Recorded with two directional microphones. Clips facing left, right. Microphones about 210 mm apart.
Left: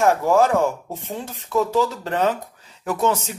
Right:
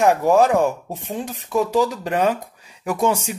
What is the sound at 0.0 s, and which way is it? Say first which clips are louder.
Speech: right 2 dB; 15° right (ahead or behind).